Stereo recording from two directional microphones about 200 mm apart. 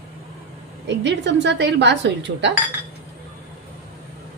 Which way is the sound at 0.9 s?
60° right (ahead or behind).